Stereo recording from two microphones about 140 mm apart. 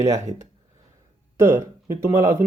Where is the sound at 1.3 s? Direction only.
20° right (ahead or behind).